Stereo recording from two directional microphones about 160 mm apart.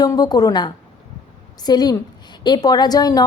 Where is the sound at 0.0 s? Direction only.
25° left (ahead or behind).